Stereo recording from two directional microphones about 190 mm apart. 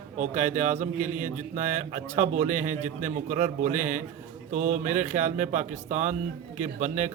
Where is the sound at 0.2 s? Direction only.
40° right (ahead or behind).